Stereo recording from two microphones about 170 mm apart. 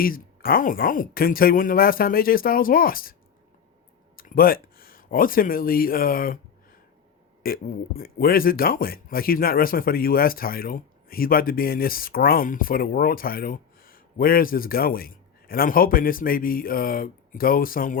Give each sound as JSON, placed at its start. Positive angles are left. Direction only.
{"t": 0.0, "sound": "speech", "side_deg": 60}
{"t": 4.2, "sound": "speech", "side_deg": 60}
{"t": 7.4, "sound": "speech", "side_deg": 60}